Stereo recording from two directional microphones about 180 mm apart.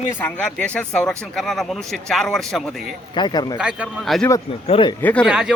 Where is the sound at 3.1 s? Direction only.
25° left (ahead or behind).